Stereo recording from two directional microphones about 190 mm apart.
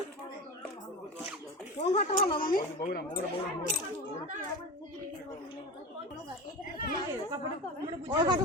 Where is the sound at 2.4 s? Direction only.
50° left (ahead or behind).